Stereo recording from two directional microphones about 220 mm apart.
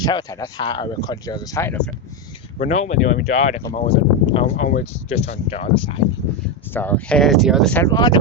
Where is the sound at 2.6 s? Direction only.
30° left (ahead or behind).